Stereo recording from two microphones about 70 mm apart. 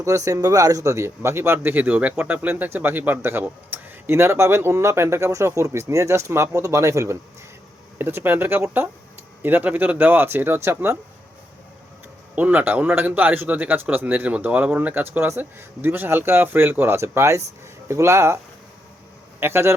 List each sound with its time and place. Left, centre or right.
0.0 s a man's voice: right
7.9 s a man's voice: right
12.4 s a man's voice: right
19.4 s speech: right